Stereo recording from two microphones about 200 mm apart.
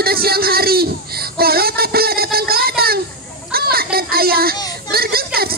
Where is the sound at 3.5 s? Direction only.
50° right (ahead or behind).